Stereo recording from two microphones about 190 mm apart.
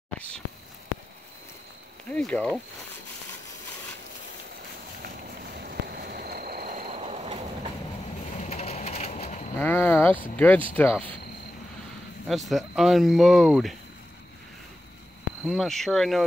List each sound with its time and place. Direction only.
2.1 s speech: 5° left (ahead or behind)
5.0 s a sound: 55° right (ahead or behind)
6.9 s train: 35° right (ahead or behind)
8.4 s crushing: 35° left (ahead or behind)
9.6 s speech: 10° left (ahead or behind)
12.3 s speech: centre (ahead or behind)
15.4 s speech: centre (ahead or behind)